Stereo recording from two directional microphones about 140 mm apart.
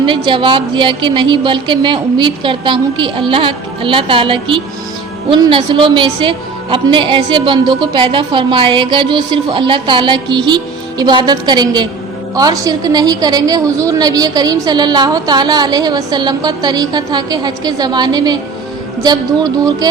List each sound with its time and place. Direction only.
0.0 s a woman's voice: 35° right (ahead or behind)